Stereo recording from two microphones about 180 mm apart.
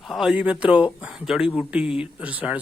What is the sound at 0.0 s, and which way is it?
Speech, centre (ahead or behind).